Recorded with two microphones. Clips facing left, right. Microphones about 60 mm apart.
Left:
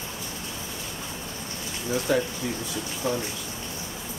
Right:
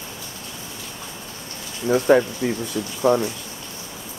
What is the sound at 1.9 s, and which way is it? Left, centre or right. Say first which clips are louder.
Speech: right 9 dB; right.